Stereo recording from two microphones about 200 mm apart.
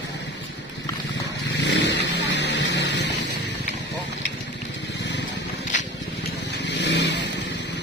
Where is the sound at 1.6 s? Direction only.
60° left (ahead or behind).